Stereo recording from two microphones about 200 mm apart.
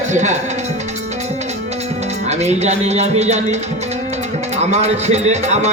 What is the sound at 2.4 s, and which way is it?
Speech, 35° right (ahead or behind).